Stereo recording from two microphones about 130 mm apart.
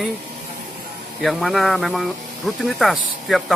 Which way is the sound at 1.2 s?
Centre (ahead or behind).